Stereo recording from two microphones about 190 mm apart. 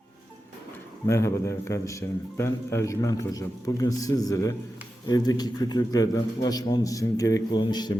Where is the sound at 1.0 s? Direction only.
15° left (ahead or behind).